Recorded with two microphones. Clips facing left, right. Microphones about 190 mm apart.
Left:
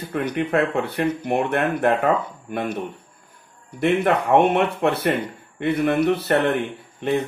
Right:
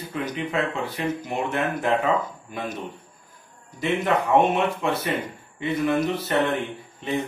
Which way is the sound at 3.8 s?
65° left (ahead or behind).